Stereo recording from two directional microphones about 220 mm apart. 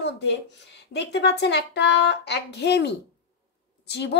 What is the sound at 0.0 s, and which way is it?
Speech, 50° left (ahead or behind).